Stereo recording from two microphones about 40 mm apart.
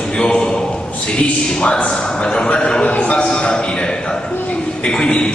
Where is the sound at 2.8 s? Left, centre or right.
Left.